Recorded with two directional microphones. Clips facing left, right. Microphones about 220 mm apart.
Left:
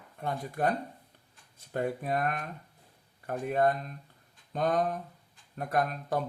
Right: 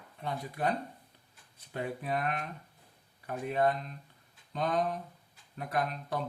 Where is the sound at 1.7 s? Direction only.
45° left (ahead or behind).